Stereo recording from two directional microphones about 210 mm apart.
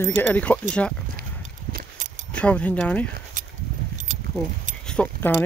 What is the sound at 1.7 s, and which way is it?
Horse, 40° right (ahead or behind).